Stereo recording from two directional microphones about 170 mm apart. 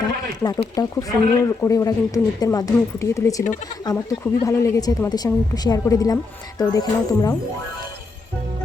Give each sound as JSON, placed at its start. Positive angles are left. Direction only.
{"t": 0.0, "sound": "speech", "side_deg": 25}